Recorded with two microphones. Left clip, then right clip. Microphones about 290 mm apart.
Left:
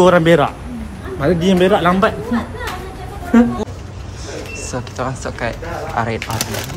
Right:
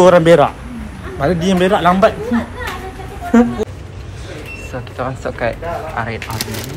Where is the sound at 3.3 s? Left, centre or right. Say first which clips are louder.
Right 1 dB; centre.